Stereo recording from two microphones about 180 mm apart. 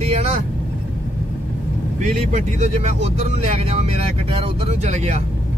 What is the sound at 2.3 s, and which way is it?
Speech, 40° right (ahead or behind).